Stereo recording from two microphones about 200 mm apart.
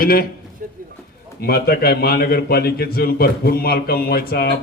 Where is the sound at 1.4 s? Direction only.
50° left (ahead or behind).